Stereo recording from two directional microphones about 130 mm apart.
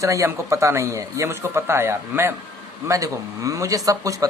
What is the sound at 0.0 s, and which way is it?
Speech, 25° right (ahead or behind).